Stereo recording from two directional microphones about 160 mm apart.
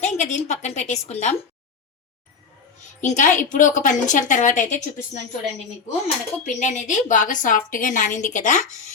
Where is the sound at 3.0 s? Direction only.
50° left (ahead or behind).